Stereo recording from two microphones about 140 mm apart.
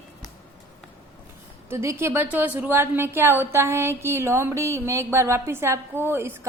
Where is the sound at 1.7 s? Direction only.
20° right (ahead or behind).